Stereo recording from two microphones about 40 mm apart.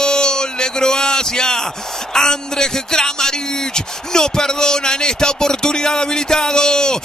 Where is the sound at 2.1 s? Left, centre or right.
Centre.